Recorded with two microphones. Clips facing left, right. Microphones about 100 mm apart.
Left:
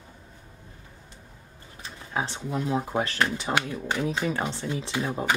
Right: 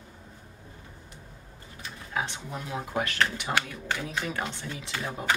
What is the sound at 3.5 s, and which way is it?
Speech, 15° left (ahead or behind).